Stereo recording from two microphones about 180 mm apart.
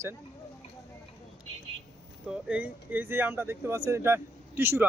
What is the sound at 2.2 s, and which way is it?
A man's voice, 5° right (ahead or behind).